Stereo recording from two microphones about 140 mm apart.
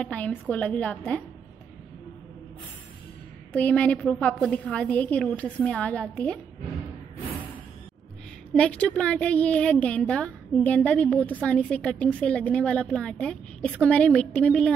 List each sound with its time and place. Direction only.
0.0 s a woman's voice: 10° left (ahead or behind)
3.5 s a woman's voice: 10° left (ahead or behind)
8.5 s a woman's voice: 10° left (ahead or behind)